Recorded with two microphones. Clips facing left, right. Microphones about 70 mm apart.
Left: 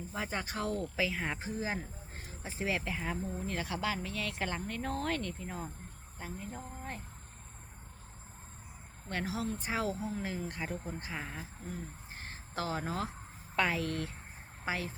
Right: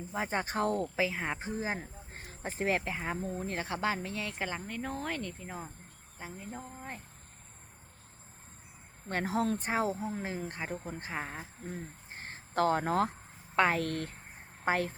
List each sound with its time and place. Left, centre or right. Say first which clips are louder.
0.1 s speech: right 5 dB; right
1.4 s speech: right 1 dB; right
2.2 s speech: right 4 dB; right
2.9 s speech: right 1 dB; right
3.2 s speech: right 2 dB; right; by 6.7 s centre
9.0 s speech: right 5 dB; right
9.7 s speech: right 3 dB; right